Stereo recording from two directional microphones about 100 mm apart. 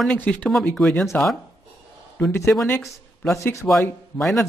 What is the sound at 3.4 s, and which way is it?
Speech, 30° left (ahead or behind).